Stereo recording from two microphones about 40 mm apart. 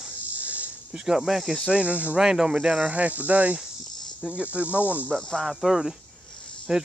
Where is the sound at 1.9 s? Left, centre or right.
Right.